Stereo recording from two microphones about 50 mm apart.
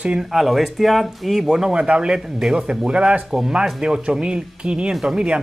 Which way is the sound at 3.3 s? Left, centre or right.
Centre.